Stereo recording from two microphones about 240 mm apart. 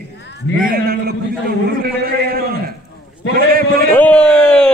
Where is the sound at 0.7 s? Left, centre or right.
Right.